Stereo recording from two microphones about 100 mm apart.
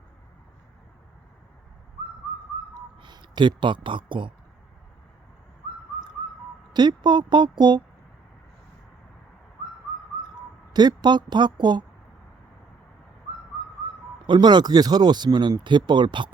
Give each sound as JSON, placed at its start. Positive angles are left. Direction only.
{"t": 3.0, "sound": "speech", "side_deg": -50}
{"t": 6.7, "sound": "speech", "side_deg": -45}
{"t": 10.7, "sound": "speech", "side_deg": -45}
{"t": 14.3, "sound": "speech", "side_deg": -50}